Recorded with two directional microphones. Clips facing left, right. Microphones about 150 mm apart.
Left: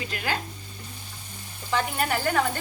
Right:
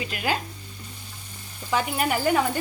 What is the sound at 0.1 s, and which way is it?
Speech, 10° right (ahead or behind).